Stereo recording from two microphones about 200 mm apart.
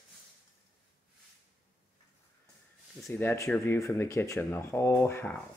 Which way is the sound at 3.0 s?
10° left (ahead or behind).